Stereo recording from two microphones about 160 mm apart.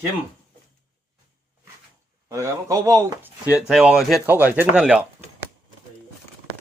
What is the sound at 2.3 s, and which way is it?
Speech, 20° right (ahead or behind).